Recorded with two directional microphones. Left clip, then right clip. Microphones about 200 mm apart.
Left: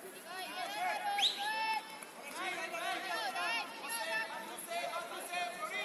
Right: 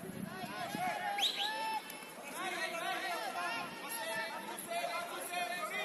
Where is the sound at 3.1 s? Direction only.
30° left (ahead or behind).